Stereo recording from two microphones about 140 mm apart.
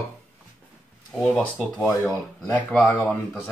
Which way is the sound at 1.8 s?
20° left (ahead or behind).